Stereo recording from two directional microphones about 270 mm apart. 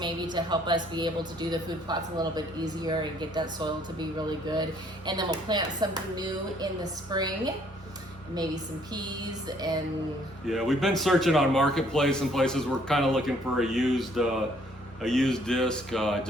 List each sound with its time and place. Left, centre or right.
0.0 s a woman's voice: centre
10.4 s speech: centre